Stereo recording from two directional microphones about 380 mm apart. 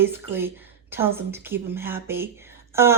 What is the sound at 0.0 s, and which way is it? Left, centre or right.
A woman's voice, centre.